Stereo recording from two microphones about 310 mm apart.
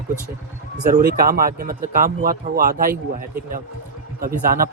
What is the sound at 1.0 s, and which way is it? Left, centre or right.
Speech, right.